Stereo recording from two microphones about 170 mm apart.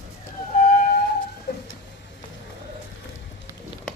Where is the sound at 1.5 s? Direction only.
70° left (ahead or behind).